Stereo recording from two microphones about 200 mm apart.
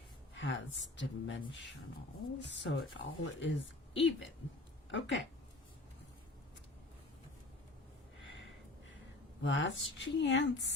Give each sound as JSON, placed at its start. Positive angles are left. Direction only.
{"t": 0.3, "sound": "speech", "side_deg": 65}
{"t": 2.4, "sound": "speech", "side_deg": 65}
{"t": 9.4, "sound": "speech", "side_deg": 65}